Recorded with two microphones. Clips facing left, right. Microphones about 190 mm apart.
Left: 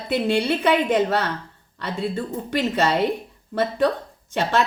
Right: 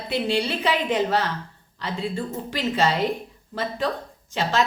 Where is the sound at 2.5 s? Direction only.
60° left (ahead or behind).